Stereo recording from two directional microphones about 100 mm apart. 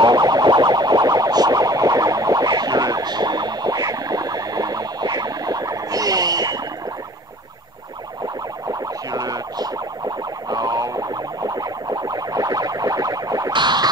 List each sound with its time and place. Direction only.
0.0 s a sound: 40° right (ahead or behind)
9.1 s music: 40° right (ahead or behind)
13.5 s music: 50° right (ahead or behind)